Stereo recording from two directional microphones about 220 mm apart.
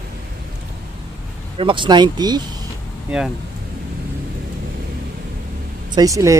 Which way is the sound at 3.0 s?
5° right (ahead or behind).